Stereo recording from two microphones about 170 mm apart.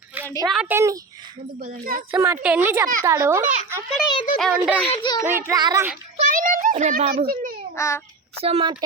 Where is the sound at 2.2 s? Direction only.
15° right (ahead or behind).